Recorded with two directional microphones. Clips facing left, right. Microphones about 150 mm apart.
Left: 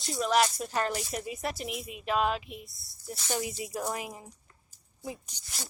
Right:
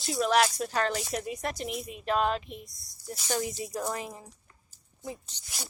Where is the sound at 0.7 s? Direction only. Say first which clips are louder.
Right 1 dB; 10° left (ahead or behind).